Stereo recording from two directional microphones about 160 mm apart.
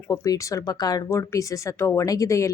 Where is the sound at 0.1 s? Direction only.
20° left (ahead or behind).